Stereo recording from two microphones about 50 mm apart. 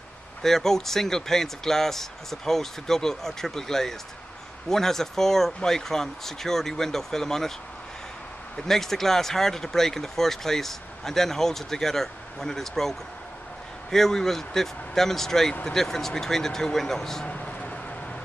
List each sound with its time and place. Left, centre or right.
0.4 s speech: centre
8.5 s speech: centre
17.3 s vehicle: left